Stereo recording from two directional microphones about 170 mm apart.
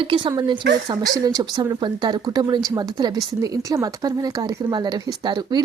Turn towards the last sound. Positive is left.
turn(degrees=-25)  # may be behind; listen again after turning